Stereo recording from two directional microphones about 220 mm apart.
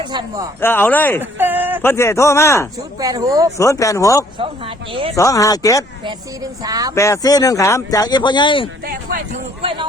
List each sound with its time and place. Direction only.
0.0 s speech: 20° right (ahead or behind)
0.6 s speech: 10° left (ahead or behind)
1.2 s a sound: 10° right (ahead or behind)
1.8 s speech: 10° left (ahead or behind)
3.0 s speech: 15° right (ahead or behind)
3.6 s speech: 15° left (ahead or behind)
4.4 s speech: 25° right (ahead or behind)
5.1 s speech: 15° left (ahead or behind)
6.6 s speech: 15° right (ahead or behind)
6.9 s speech: 15° left (ahead or behind)
9.6 s speech: 25° right (ahead or behind)